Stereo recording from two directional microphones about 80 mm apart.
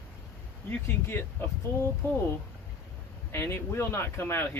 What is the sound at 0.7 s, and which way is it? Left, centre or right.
Speech, left.